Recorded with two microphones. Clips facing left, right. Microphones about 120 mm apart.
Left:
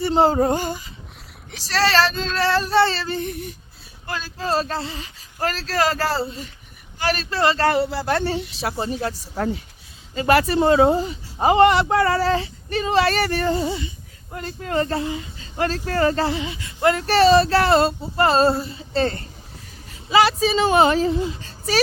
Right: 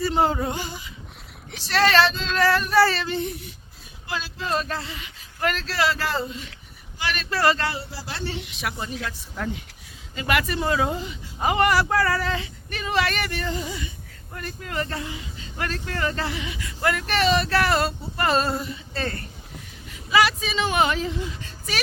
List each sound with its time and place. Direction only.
0.0 s a sound: 30° left (ahead or behind)
1.7 s speech: 35° left (ahead or behind)
2.4 s speech: 30° left (ahead or behind); by 3.5 s 50° left (ahead or behind)
4.2 s speech: 35° left (ahead or behind)
7.7 s speech: 65° left (ahead or behind); by 21.8 s 35° left (ahead or behind)